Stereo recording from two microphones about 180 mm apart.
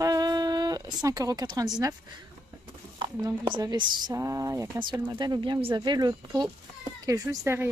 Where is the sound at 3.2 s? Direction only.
20° right (ahead or behind).